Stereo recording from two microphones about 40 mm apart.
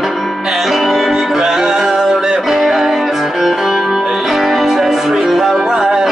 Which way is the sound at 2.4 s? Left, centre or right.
Centre.